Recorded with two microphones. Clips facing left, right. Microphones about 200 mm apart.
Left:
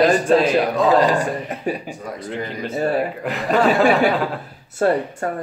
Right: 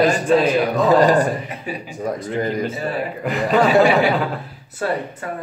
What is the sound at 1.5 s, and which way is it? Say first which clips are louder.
Speech: left 4 dB; 45° left (ahead or behind).